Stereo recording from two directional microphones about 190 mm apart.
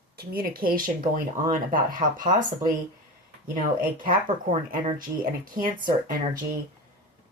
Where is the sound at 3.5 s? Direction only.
45° right (ahead or behind).